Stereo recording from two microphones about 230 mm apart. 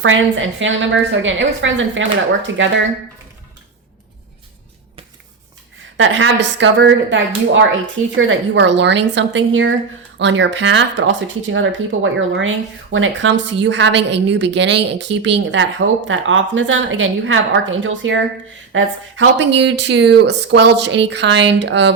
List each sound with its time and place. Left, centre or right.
0.0 s a woman's voice: right
6.0 s a woman's voice: right